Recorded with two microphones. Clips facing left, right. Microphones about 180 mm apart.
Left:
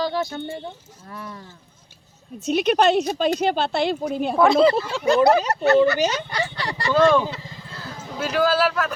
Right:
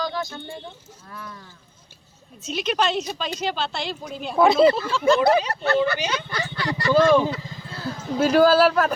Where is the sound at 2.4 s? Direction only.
60° left (ahead or behind).